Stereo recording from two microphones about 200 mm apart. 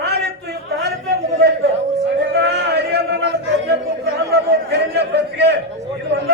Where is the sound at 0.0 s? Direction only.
55° right (ahead or behind).